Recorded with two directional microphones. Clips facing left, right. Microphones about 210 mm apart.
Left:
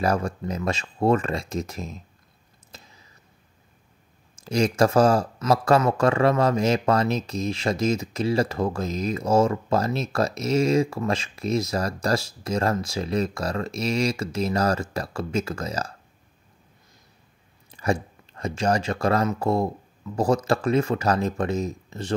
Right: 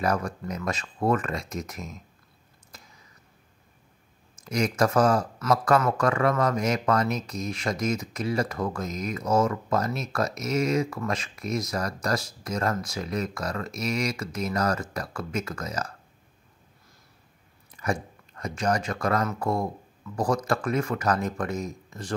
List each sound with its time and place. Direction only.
0.0 s speech: 30° left (ahead or behind)
2.7 s a sound: 25° left (ahead or behind)
4.5 s speech: 30° left (ahead or behind)
17.6 s speech: 30° left (ahead or behind)